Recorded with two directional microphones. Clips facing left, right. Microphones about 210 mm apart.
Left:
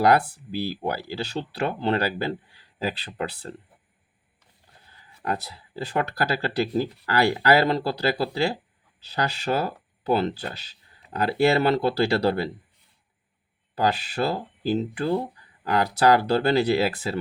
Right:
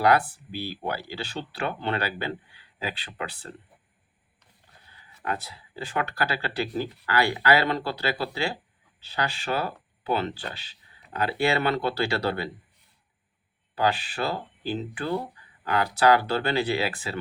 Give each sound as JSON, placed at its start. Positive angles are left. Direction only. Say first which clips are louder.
{"t": 0.0, "sound": "speech", "louder": "left 2 dB", "side_deg": 40}
{"t": 5.2, "sound": "speech", "louder": "left 3 dB", "side_deg": 40}
{"t": 13.7, "sound": "speech", "louder": "left 2 dB", "side_deg": 40}